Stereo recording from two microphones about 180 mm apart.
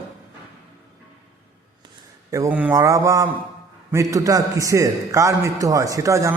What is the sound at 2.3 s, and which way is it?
A man's voice, 15° right (ahead or behind).